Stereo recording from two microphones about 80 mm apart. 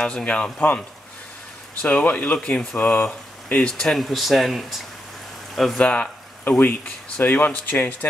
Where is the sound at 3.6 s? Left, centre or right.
Centre.